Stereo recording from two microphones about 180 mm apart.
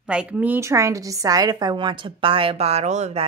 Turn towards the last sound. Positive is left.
turn(degrees=-40)  # may be behind; listen again after turning